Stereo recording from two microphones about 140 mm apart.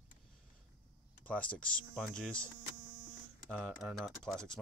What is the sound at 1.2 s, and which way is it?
Speech, 10° left (ahead or behind).